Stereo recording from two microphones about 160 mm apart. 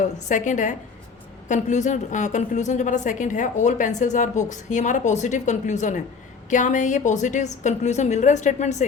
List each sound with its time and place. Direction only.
0.3 s a woman's voice: 50° left (ahead or behind)